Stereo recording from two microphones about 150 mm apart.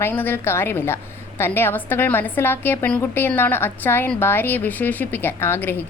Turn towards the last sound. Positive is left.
turn(degrees=15)  # may be behind; listen again after turning